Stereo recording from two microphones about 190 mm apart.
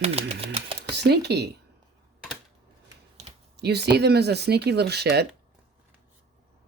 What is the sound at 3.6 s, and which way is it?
Speech, 60° right (ahead or behind).